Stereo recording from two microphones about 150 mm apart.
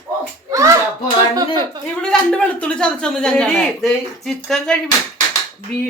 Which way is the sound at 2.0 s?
5° left (ahead or behind).